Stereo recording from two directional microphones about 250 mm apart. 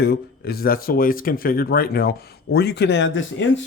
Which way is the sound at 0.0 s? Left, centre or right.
Left.